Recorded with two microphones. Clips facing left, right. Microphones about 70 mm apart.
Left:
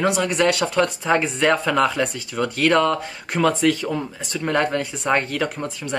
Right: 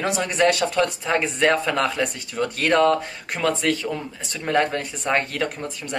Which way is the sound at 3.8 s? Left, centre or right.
Centre.